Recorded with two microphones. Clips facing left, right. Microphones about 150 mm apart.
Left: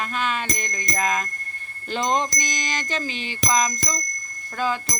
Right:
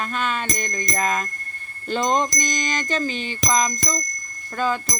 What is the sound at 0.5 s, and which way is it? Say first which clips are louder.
Music: right 3 dB; 45° right (ahead or behind).